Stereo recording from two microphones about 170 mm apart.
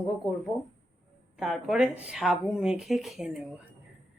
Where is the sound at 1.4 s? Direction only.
5° right (ahead or behind).